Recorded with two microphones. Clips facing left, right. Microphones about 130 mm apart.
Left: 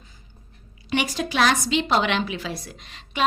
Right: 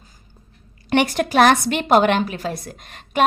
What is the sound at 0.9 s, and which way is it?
A woman's voice, 60° right (ahead or behind).